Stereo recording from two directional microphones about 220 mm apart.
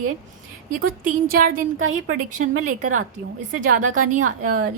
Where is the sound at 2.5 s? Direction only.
75° right (ahead or behind).